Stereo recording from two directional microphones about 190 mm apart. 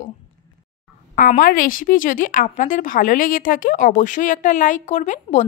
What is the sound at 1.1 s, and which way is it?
A woman's voice, 45° left (ahead or behind).